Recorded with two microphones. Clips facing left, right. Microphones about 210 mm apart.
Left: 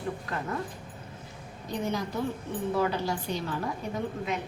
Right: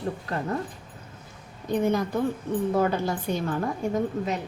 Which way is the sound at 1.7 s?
55° right (ahead or behind).